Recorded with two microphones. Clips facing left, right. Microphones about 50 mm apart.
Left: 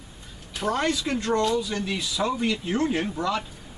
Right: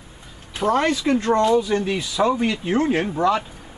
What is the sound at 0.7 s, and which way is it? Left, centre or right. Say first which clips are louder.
Speech: right 6 dB; right.